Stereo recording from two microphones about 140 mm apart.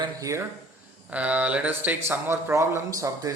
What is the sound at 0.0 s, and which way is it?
Speech, 25° right (ahead or behind).